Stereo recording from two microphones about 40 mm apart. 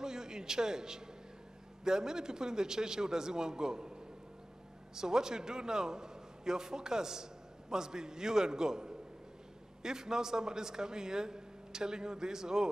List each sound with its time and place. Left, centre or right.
0.0 s music: centre
1.9 s a man's voice: centre